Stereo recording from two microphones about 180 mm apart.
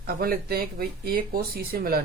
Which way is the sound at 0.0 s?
55° right (ahead or behind).